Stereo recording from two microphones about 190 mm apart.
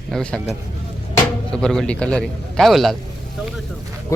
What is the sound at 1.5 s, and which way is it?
A man's voice, 5° left (ahead or behind).